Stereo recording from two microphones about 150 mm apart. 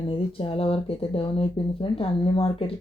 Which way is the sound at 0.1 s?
35° left (ahead or behind).